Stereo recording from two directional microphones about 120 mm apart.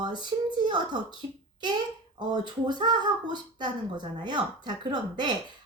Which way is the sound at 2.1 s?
40° right (ahead or behind).